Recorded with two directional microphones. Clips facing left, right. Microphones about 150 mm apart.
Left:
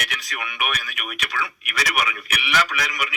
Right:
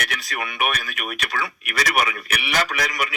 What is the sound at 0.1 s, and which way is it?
A man's voice, 45° right (ahead or behind).